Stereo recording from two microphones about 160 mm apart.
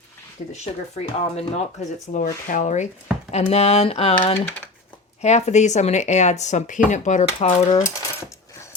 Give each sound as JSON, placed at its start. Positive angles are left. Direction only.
{"t": 0.5, "sound": "speech", "side_deg": 40}
{"t": 5.2, "sound": "speech", "side_deg": 45}